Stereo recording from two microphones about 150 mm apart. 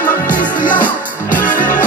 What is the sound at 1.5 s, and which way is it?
Music, 60° left (ahead or behind).